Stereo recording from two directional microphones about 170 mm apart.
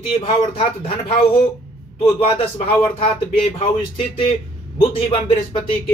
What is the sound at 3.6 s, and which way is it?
A man's voice, 30° left (ahead or behind).